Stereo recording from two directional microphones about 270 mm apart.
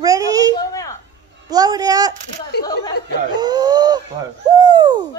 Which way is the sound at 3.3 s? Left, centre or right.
Centre.